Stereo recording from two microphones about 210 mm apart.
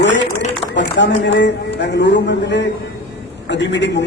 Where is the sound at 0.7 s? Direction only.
55° left (ahead or behind).